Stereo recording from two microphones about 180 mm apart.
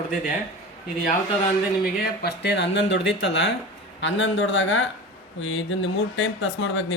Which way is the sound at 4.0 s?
90° left.